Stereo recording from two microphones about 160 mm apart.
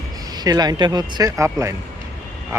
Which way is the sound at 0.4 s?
25° right (ahead or behind).